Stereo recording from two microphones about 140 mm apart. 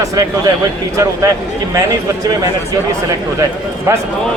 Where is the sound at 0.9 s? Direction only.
20° right (ahead or behind).